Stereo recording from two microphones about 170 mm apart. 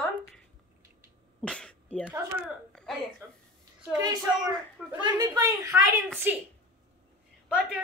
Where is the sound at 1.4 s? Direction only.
5° left (ahead or behind).